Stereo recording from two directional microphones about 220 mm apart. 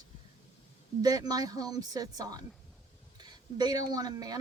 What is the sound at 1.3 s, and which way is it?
Speech, 15° right (ahead or behind).